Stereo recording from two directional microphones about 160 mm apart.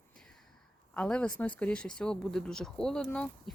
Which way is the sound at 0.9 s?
5° left (ahead or behind).